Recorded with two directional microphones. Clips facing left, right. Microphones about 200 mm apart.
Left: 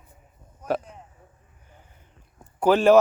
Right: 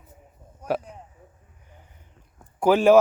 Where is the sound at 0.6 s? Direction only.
10° right (ahead or behind).